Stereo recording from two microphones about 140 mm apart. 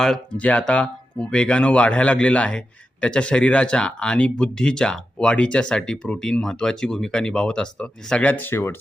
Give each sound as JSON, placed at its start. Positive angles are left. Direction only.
{"t": 0.0, "sound": "speech", "side_deg": 5}